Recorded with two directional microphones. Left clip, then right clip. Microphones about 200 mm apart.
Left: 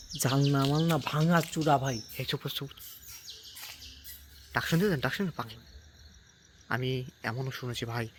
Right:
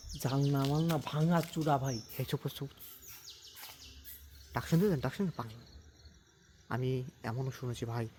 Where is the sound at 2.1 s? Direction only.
20° right (ahead or behind).